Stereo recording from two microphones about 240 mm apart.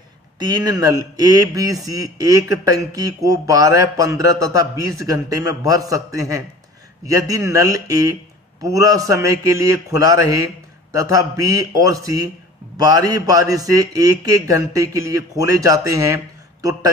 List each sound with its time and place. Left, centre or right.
0.4 s speech: centre